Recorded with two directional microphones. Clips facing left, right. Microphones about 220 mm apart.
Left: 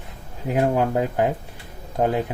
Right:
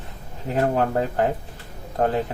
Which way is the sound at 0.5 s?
10° left (ahead or behind).